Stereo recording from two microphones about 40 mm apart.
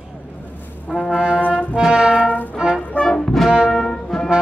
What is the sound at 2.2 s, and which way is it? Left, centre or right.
Music, left.